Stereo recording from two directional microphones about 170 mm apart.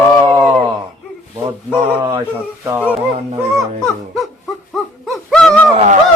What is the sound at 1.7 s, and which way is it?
Speech, 10° right (ahead or behind).